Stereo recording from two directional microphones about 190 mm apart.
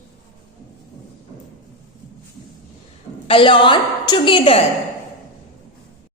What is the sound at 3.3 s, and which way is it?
A woman's voice, 25° left (ahead or behind).